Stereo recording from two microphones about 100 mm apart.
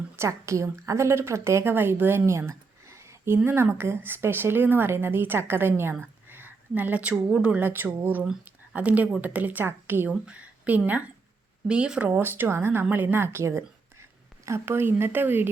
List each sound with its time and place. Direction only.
0.2 s a woman's voice: 30° right (ahead or behind)